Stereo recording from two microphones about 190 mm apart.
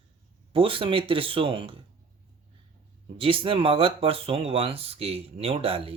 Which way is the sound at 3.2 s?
30° right (ahead or behind).